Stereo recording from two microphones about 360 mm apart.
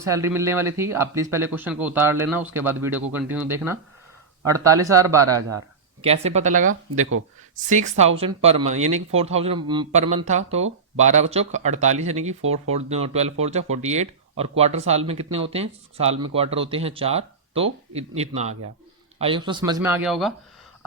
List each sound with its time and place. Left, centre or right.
0.0 s speech: centre
5.3 s speech: right
6.0 s speech: centre